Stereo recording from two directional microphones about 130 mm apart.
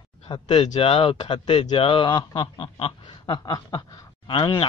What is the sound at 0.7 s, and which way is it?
Speech, 50° left (ahead or behind).